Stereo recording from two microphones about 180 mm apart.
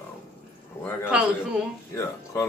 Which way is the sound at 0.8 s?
15° left (ahead or behind).